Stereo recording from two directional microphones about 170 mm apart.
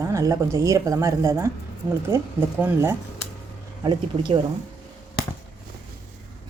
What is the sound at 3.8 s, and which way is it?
Speech, 30° right (ahead or behind).